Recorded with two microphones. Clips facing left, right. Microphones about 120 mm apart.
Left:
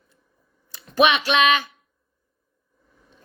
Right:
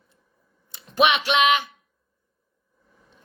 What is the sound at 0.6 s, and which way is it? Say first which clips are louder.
Speech: left 2 dB; 20° right (ahead or behind).